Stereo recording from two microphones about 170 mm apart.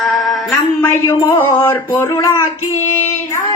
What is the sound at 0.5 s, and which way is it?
Speech, 20° left (ahead or behind).